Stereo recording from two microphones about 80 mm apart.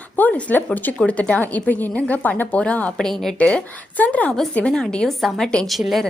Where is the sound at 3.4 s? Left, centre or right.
Centre.